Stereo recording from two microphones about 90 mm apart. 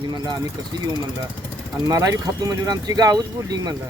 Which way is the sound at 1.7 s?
40° right (ahead or behind).